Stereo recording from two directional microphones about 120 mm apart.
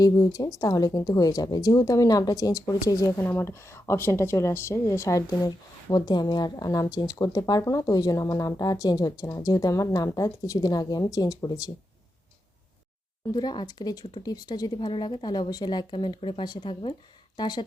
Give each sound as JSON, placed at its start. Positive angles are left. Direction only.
{"t": 0.0, "sound": "speech", "side_deg": 30}
{"t": 13.3, "sound": "speech", "side_deg": 35}